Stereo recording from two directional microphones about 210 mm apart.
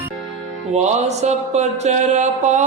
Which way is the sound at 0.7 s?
35° right (ahead or behind).